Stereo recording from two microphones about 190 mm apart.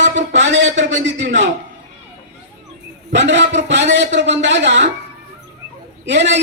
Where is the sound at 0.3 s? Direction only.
70° right (ahead or behind).